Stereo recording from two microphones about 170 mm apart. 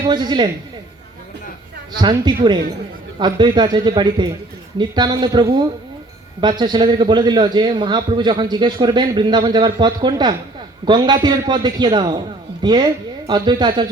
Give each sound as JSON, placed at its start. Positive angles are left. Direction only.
{"t": 0.1, "sound": "a man's voice", "side_deg": -25}
{"t": 2.0, "sound": "a man's voice", "side_deg": -25}